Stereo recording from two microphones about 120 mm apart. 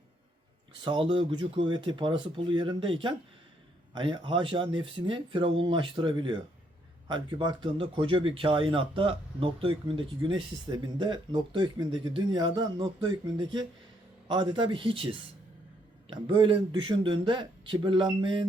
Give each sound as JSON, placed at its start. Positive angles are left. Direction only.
{"t": 0.9, "sound": "speech", "side_deg": -45}